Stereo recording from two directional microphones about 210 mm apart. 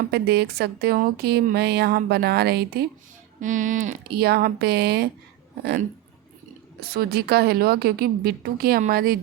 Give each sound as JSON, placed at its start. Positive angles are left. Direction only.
{"t": 0.1, "sound": "a woman's voice", "side_deg": -50}
{"t": 3.4, "sound": "a woman's voice", "side_deg": -35}
{"t": 6.7, "sound": "a woman's voice", "side_deg": -45}